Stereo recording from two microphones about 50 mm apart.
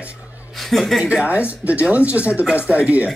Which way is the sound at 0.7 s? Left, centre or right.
Centre.